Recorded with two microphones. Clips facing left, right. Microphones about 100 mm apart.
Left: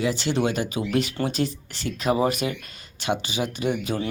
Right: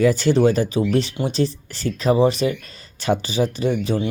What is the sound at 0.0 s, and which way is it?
Speech, 45° right (ahead or behind).